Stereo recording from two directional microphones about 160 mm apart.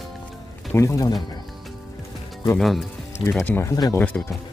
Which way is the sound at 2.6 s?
Centre (ahead or behind).